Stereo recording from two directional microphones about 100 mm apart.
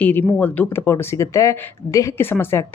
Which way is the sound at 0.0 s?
20° left (ahead or behind).